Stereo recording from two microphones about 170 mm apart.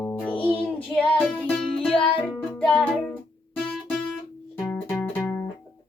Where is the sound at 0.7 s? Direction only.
10° left (ahead or behind).